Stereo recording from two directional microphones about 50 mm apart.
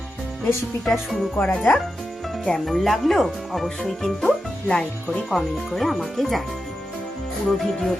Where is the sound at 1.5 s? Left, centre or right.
Centre.